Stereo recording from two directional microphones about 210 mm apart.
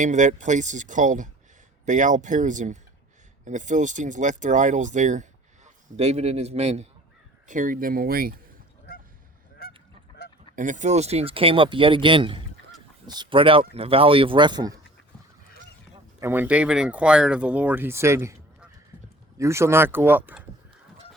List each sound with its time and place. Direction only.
0.0 s speech: 35° right (ahead or behind)
9.6 s goose: 45° left (ahead or behind)
10.5 s speech: 40° right (ahead or behind); by 14.8 s 20° right (ahead or behind)
16.2 s speech: 10° right (ahead or behind)